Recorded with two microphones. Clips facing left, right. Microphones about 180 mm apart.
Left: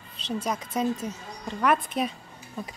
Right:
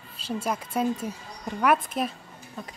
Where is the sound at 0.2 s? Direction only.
5° right (ahead or behind).